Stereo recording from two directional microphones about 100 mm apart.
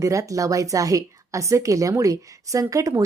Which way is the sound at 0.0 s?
30° right (ahead or behind).